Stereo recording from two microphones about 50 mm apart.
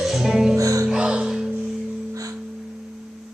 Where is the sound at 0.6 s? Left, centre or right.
Right.